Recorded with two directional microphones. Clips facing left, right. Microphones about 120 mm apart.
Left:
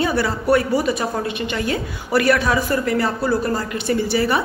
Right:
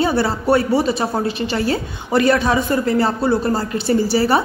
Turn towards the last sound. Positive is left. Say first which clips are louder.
# right 3 dB
turn(degrees=-30)  # may be behind; listen again after turning